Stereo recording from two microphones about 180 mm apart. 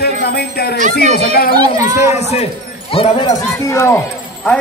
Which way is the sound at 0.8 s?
45° right (ahead or behind).